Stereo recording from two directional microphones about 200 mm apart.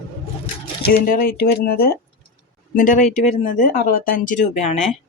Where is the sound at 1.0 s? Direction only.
50° left (ahead or behind).